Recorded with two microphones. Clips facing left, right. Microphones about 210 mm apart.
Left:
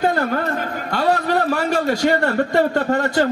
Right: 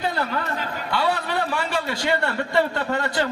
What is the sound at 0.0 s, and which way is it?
A man's voice, 50° left (ahead or behind).